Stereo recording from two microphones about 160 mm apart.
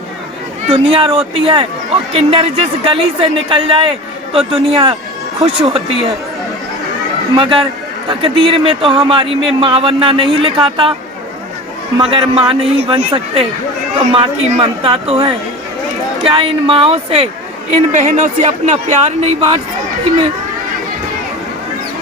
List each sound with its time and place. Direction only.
0.7 s speech: 35° right (ahead or behind)
7.3 s speech: 30° right (ahead or behind)
11.9 s speech: 35° right (ahead or behind)